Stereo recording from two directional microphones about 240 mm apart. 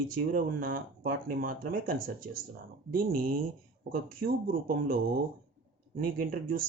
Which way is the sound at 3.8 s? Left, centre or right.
Right.